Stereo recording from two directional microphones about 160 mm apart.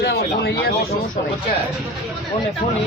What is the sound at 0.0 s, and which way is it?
Speech, 85° left.